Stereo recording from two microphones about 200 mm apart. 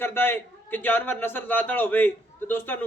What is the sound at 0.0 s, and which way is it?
A man's voice, 10° left (ahead or behind).